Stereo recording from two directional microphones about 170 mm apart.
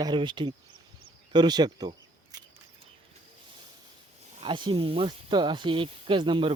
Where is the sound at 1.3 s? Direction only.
25° right (ahead or behind).